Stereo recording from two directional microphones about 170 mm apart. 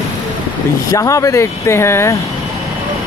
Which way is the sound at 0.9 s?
20° left (ahead or behind).